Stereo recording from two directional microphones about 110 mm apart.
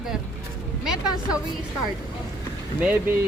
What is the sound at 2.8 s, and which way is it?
Speech, 15° right (ahead or behind).